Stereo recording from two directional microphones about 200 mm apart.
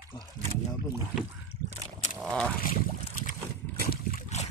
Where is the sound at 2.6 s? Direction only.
45° left (ahead or behind).